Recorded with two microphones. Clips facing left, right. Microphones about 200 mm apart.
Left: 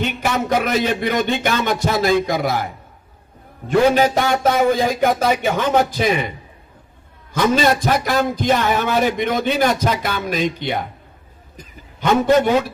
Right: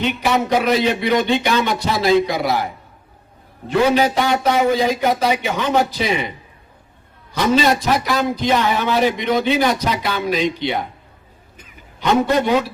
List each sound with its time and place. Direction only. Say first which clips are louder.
0.0 s speech: right 2 dB; 45° left (ahead or behind)
3.7 s speech: left 1 dB; 50° left (ahead or behind)
7.3 s speech: even; 45° left (ahead or behind)
11.5 s a sound: left 4 dB; 40° left (ahead or behind)